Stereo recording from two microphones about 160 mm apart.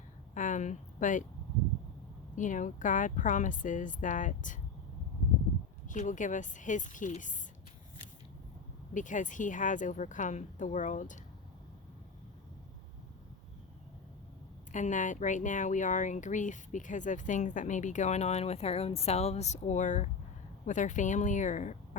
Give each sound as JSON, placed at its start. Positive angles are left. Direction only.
{"t": 0.3, "sound": "a sound", "side_deg": 50}
{"t": 2.3, "sound": "speech", "side_deg": 50}
{"t": 5.9, "sound": "speech", "side_deg": 50}
{"t": 8.9, "sound": "speech", "side_deg": 50}
{"t": 14.7, "sound": "speech", "side_deg": 50}